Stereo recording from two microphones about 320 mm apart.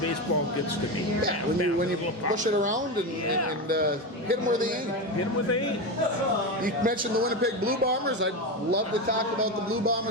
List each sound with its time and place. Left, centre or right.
2.3 s a man's voice: right
4.3 s a man's voice: right
6.7 s a man's voice: right